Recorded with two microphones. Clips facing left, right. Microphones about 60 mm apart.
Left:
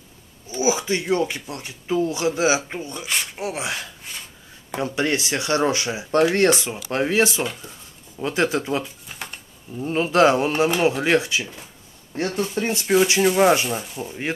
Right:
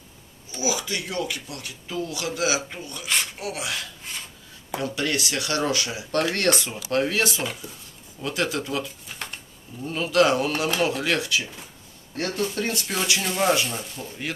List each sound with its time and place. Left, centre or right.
0.5 s speech: left
9.8 s speech: left